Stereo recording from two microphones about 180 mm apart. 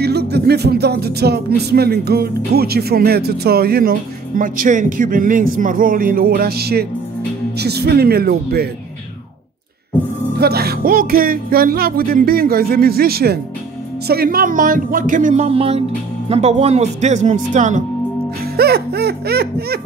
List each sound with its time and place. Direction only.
0.0 s music: 65° right (ahead or behind)
4.4 s speech: 45° right (ahead or behind)
7.5 s music: 65° right (ahead or behind)
10.3 s music: 60° right (ahead or behind)
14.0 s speech: 60° right (ahead or behind)
18.4 s music: 60° right (ahead or behind)